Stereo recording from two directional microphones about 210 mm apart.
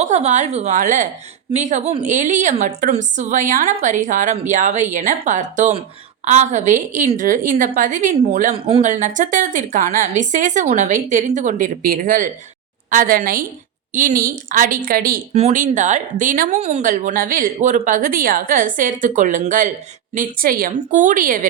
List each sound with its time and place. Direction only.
0.0 s speech: 30° right (ahead or behind)